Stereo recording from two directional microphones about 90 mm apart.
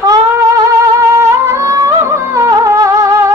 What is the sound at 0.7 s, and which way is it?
Music, 35° right (ahead or behind).